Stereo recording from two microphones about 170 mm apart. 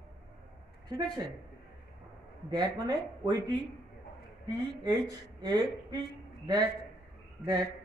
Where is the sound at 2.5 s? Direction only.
25° right (ahead or behind).